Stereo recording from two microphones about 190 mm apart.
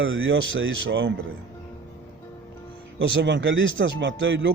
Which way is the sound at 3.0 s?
70° right (ahead or behind).